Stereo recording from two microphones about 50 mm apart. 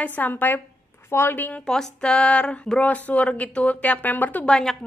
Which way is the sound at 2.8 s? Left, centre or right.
Left.